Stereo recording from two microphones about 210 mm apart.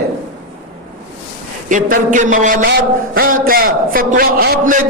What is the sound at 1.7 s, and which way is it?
A man's voice, 35° right (ahead or behind).